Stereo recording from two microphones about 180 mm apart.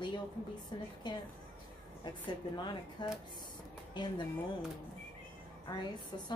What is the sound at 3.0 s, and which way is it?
Speech, 25° left (ahead or behind).